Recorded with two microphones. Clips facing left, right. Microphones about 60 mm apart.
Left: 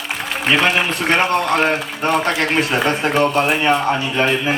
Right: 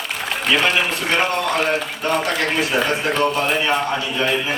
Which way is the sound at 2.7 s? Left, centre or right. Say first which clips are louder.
Left 2 dB; left.